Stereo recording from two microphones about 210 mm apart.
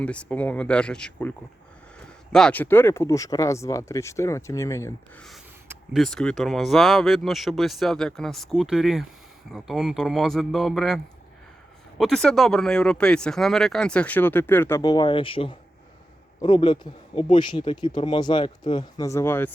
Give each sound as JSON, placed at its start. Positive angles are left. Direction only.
{"t": 0.0, "sound": "speech", "side_deg": 5}
{"t": 2.3, "sound": "speech", "side_deg": 5}
{"t": 5.6, "sound": "speech", "side_deg": 0}